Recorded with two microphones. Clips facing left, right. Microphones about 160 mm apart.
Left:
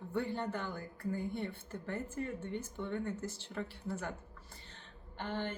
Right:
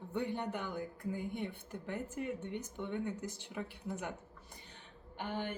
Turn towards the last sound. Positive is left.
turn(degrees=-10)  # may be behind; listen again after turning